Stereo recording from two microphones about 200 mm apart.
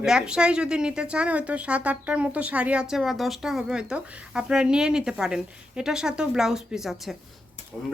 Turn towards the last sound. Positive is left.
turn(degrees=0)  # may be behind; listen again after turning